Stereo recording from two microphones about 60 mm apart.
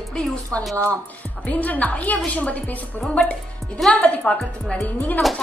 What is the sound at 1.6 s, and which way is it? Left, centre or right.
A woman's voice, left.